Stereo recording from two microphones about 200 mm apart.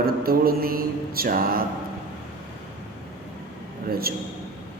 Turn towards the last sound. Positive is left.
turn(degrees=-50)  # may be behind; listen again after turning